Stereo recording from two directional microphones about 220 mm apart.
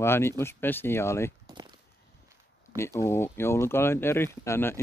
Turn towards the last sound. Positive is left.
turn(degrees=10)  # may be behind; listen again after turning